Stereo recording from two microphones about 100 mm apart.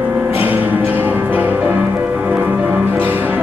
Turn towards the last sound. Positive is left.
turn(degrees=-15)  # may be behind; listen again after turning